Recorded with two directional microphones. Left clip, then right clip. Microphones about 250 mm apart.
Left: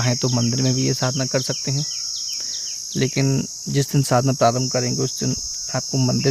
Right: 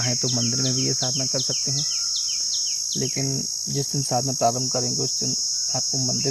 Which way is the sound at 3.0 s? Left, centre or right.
Left.